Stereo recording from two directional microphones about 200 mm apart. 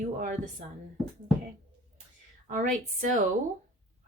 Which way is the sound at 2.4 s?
40° right (ahead or behind).